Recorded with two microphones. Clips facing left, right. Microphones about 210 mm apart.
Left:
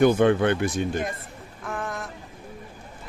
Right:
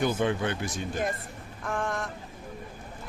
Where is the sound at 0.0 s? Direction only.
60° left (ahead or behind).